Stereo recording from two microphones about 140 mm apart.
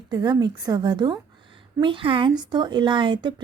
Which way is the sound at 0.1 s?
30° right (ahead or behind).